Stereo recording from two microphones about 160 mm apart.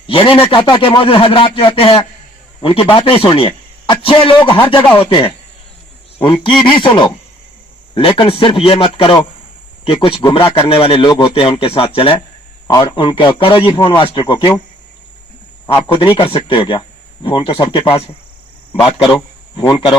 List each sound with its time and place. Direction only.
0.1 s a man's voice: 35° left (ahead or behind)
15.9 s speech: 30° left (ahead or behind)
19.1 s a sound: 30° left (ahead or behind)